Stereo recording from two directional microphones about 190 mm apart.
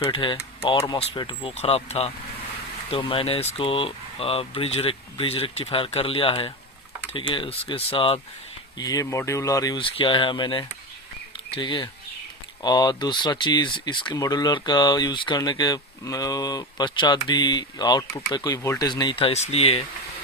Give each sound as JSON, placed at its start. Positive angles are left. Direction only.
{"t": 0.1, "sound": "speech", "side_deg": 25}
{"t": 8.8, "sound": "speech", "side_deg": 20}